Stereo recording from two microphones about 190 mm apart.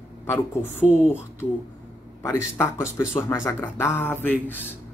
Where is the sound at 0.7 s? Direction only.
40° left (ahead or behind).